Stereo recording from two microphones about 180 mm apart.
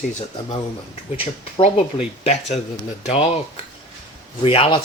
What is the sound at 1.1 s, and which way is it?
Speech, 30° left (ahead or behind).